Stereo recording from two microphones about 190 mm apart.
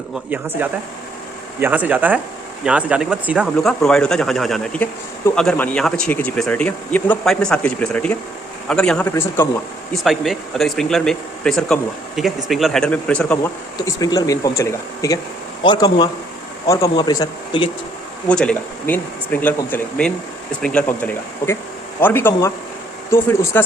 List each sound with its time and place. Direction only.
0.3 s speech: 10° right (ahead or behind); by 9.5 s 10° left (ahead or behind)
9.9 s speech: centre (ahead or behind)
13.7 s speech: 20° left (ahead or behind)
18.3 s speech: 5° left (ahead or behind)